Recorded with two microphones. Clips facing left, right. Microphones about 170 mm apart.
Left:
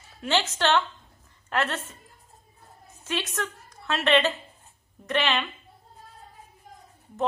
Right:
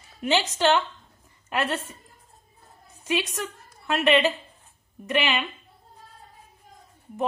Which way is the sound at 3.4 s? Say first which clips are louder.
Even; 10° right (ahead or behind).